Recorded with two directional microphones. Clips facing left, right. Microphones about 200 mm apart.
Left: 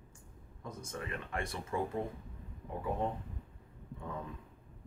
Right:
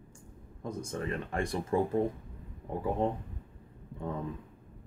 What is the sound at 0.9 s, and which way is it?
Speech, 35° right (ahead or behind).